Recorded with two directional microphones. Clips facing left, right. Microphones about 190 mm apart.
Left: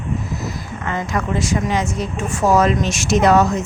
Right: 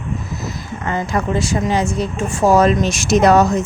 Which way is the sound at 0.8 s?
30° right (ahead or behind).